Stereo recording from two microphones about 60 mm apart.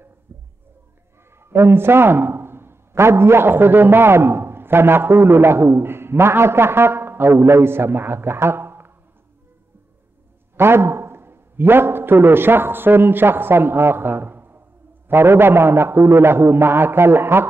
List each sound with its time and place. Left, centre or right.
0.3 s a sound: right
1.4 s a man's voice: right
10.5 s a man's voice: right